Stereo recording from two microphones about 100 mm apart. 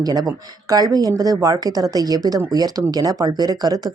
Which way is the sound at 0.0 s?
40° right (ahead or behind).